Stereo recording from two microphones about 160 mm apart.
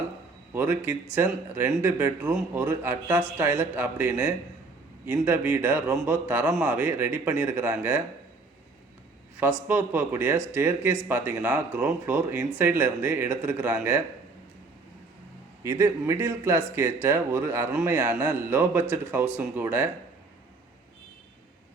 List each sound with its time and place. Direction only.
0.5 s a man's voice: 10° right (ahead or behind)
9.4 s a man's voice: 10° right (ahead or behind)
15.6 s a man's voice: 20° right (ahead or behind)